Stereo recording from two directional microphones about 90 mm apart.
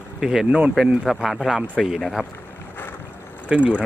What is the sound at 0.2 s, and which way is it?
Speech, 5° right (ahead or behind).